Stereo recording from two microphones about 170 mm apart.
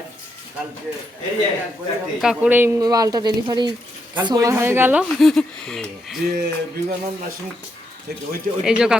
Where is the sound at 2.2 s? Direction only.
5° right (ahead or behind).